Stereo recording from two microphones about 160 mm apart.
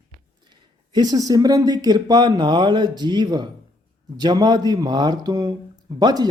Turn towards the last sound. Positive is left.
turn(degrees=-25)  # may be behind; listen again after turning